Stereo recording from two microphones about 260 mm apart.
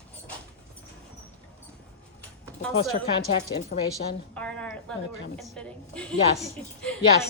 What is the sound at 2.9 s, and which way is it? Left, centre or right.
Speech, left.